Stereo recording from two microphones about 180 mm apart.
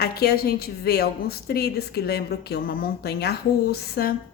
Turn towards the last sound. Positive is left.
turn(degrees=60)  # may be behind; listen again after turning